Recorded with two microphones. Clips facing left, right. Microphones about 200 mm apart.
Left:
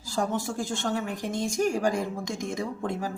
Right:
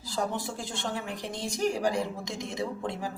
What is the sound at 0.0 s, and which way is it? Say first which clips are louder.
A woman's voice: left 3 dB; 45° left (ahead or behind).